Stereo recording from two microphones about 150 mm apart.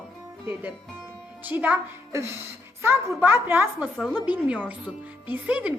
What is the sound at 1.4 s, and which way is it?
A woman's voice, 10° right (ahead or behind).